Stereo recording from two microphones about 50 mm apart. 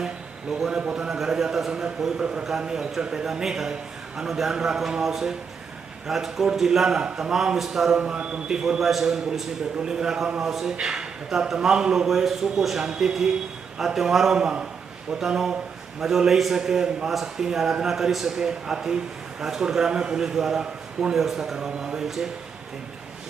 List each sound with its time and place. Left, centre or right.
0.7 s a man's voice: centre
16.0 s a man's voice: centre